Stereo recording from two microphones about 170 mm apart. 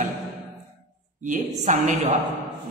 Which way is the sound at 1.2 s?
45° right (ahead or behind).